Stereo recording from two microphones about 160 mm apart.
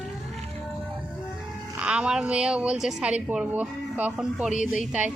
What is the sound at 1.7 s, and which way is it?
A woman's voice, 5° right (ahead or behind).